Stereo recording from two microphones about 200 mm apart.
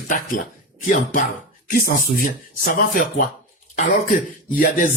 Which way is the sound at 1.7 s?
45° left (ahead or behind).